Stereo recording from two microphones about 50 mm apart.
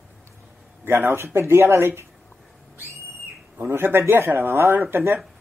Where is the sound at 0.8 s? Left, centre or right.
Right.